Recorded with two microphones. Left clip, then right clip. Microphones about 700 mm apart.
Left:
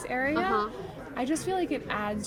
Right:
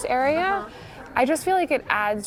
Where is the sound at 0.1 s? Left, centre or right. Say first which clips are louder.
Right 6 dB; right.